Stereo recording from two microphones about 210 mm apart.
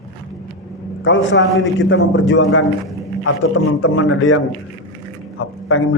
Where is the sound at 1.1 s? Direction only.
60° left (ahead or behind).